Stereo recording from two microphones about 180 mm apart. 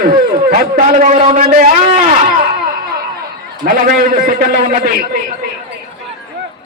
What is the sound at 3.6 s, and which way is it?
A man's voice, 50° right (ahead or behind).